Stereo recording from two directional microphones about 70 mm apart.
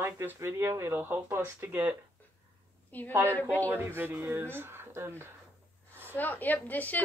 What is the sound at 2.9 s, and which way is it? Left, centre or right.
Speech, left.